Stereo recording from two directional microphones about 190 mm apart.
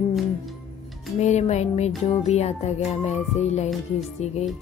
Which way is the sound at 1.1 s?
35° left (ahead or behind).